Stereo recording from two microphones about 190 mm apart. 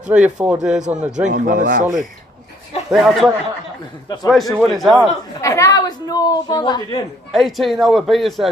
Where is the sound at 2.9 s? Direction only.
Centre (ahead or behind).